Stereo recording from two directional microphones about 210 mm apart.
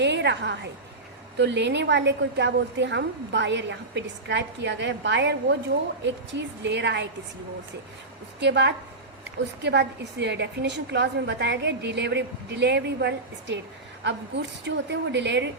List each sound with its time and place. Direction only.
0.0 s a woman's voice: 55° right (ahead or behind)
6.6 s a woman's voice: 55° right (ahead or behind)
8.4 s a woman's voice: 55° right (ahead or behind)